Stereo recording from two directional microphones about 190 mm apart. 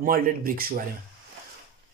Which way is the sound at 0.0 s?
50° right (ahead or behind).